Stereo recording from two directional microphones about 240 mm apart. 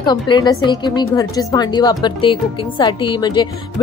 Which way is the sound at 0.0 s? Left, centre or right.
Centre.